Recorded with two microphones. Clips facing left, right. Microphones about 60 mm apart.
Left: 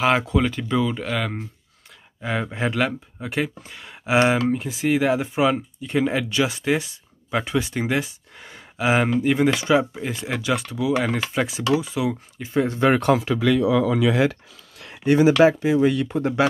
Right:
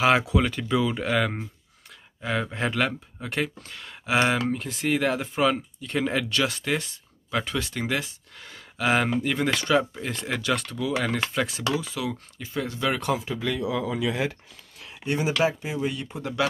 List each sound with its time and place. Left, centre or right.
0.0 s speech: centre
2.2 s speech: centre; by 13.1 s left
13.1 s speech: left
14.8 s speech: left
16.1 s speech: left